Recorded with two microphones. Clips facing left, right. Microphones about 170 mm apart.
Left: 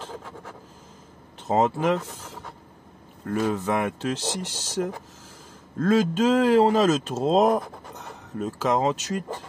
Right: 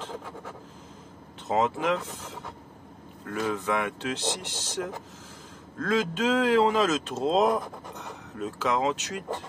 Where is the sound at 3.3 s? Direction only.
40° left (ahead or behind).